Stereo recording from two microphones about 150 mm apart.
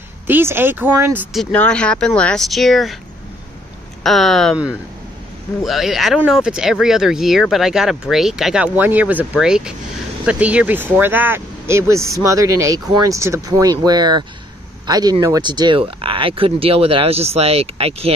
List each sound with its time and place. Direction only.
0.3 s speech: 15° right (ahead or behind)
1.3 s speech: 5° left (ahead or behind)
4.0 s speech: centre (ahead or behind); by 18.1 s 40° right (ahead or behind)